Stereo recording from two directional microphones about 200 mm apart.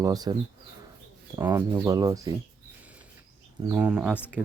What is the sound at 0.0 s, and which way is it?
Speech, 20° right (ahead or behind).